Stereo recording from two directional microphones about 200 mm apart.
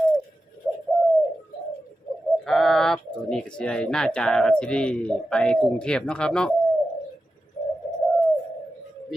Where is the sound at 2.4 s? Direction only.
Centre (ahead or behind).